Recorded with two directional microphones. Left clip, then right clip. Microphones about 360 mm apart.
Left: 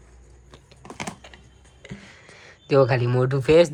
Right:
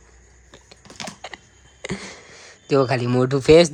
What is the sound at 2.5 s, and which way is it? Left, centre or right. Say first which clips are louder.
Speech: even; centre.